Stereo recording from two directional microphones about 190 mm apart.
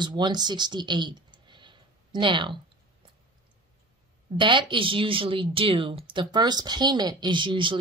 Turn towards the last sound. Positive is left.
turn(degrees=-25)  # may be behind; listen again after turning